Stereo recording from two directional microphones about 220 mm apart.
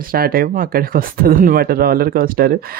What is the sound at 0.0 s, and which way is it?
Speech, 40° right (ahead or behind).